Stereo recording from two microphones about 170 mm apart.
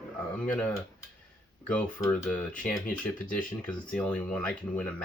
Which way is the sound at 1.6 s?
5° left (ahead or behind).